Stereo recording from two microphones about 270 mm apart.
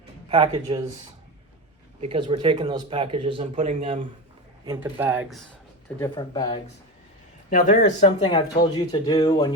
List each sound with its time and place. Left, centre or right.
0.3 s speech: centre
2.0 s speech: centre
4.6 s speech: centre
6.0 s speech: centre
7.5 s speech: left